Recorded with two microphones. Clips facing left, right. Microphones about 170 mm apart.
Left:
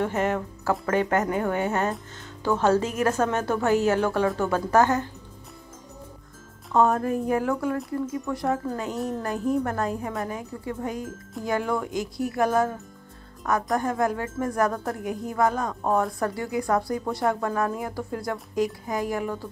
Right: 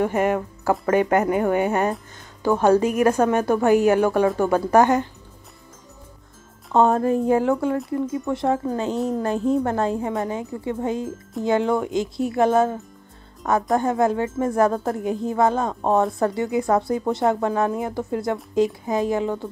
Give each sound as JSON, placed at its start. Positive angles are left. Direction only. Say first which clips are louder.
{"t": 0.0, "sound": "speech", "louder": "right 4 dB", "side_deg": -10}
{"t": 6.7, "sound": "a woman's voice", "louder": "right 4 dB", "side_deg": -25}